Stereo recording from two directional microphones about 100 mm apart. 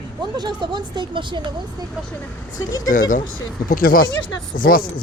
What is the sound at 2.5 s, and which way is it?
Speech, 40° left (ahead or behind).